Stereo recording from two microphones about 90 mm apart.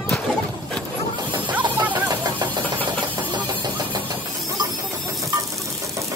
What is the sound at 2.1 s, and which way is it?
Engine, 50° right (ahead or behind).